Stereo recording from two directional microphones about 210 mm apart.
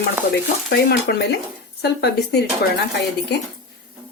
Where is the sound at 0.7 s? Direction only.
50° left (ahead or behind).